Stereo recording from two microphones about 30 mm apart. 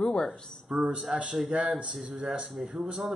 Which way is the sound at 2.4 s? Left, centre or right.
Centre.